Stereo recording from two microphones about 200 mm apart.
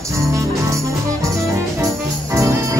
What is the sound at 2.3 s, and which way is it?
Music, 15° right (ahead or behind).